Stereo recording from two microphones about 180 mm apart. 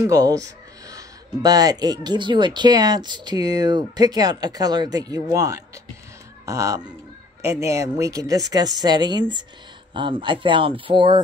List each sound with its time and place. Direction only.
0.0 s speech: 20° right (ahead or behind)